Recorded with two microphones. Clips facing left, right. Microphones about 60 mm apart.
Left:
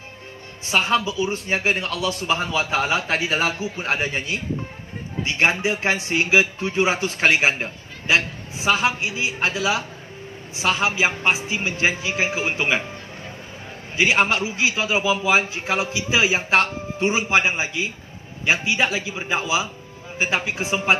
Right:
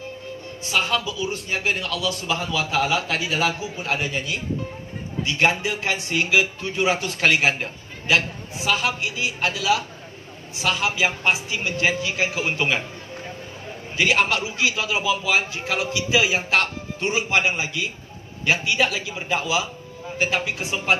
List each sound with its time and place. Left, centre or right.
0.7 s a man's voice: left
13.9 s a man's voice: left